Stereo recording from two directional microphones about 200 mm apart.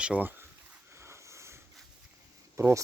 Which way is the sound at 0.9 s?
15° right (ahead or behind).